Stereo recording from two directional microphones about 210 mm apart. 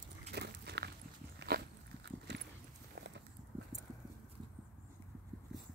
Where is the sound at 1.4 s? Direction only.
50° right (ahead or behind).